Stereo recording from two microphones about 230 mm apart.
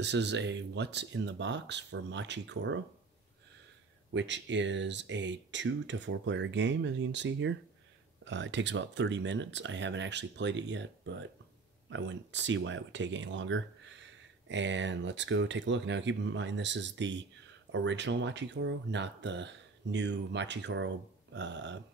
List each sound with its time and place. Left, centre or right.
0.0 s speech: right
4.1 s speech: right